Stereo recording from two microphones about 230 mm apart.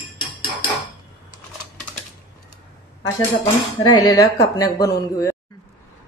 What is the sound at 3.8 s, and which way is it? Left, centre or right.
A woman's voice, centre.